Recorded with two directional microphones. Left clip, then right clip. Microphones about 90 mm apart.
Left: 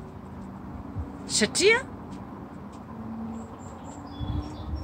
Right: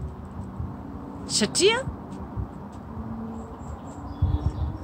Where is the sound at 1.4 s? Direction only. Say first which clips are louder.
Even; 35° right (ahead or behind).